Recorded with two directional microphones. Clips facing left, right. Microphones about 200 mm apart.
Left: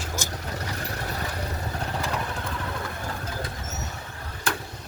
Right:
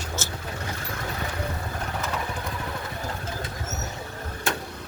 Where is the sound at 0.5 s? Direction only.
35° left (ahead or behind).